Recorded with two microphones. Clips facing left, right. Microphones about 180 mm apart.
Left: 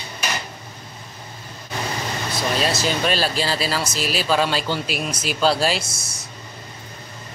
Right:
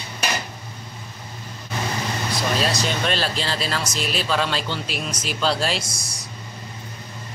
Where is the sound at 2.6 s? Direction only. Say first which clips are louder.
Left 2 dB; 5° left (ahead or behind).